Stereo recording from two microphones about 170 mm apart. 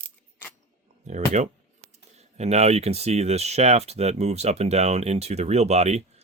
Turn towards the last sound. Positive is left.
turn(degrees=-40)  # may be behind; listen again after turning